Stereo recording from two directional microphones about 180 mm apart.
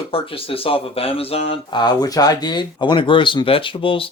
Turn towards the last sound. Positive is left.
turn(degrees=30)  # may be behind; listen again after turning